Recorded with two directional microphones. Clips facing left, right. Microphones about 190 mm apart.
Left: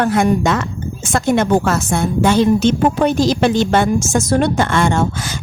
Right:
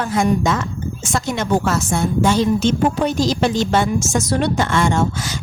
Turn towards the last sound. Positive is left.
turn(degrees=55)  # may be behind; listen again after turning